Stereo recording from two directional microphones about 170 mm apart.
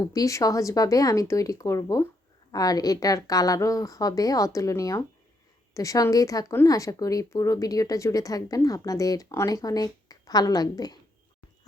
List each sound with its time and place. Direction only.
0.0 s speech: 20° left (ahead or behind)